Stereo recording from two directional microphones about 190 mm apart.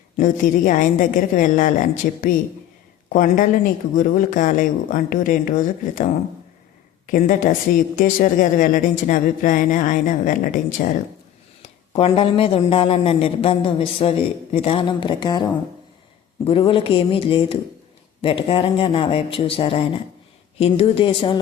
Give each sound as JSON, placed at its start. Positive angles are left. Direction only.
{"t": 0.2, "sound": "a woman's voice", "side_deg": 45}
{"t": 7.1, "sound": "a woman's voice", "side_deg": 45}
{"t": 11.6, "sound": "a woman's voice", "side_deg": 30}